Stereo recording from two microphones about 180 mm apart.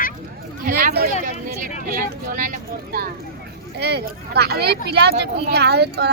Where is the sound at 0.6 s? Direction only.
55° right (ahead or behind).